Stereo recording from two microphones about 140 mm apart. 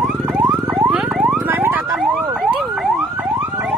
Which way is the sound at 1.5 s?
15° right (ahead or behind).